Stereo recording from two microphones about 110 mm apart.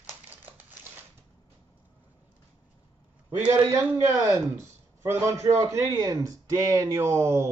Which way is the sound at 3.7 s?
25° right (ahead or behind).